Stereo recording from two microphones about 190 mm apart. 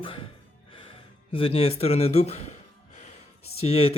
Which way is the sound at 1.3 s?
30° left (ahead or behind).